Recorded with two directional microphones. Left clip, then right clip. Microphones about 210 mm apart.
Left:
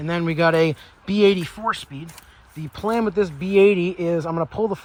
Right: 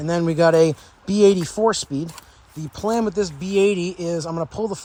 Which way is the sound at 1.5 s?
30° right (ahead or behind).